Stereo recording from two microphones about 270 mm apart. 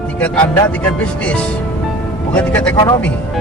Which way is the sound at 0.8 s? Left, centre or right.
Centre.